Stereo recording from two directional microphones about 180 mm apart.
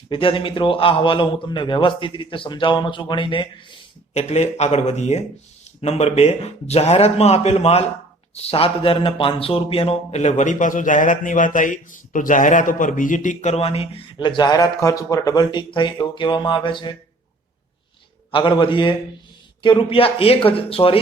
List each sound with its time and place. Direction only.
0.1 s a man's voice: 30° left (ahead or behind)
18.3 s a man's voice: 25° left (ahead or behind)